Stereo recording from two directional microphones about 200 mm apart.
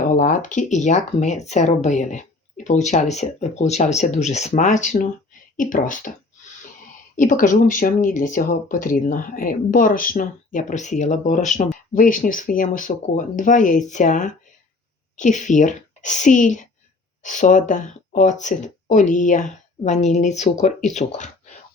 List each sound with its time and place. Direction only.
0.0 s speech: 40° left (ahead or behind)
7.2 s speech: 40° left (ahead or behind)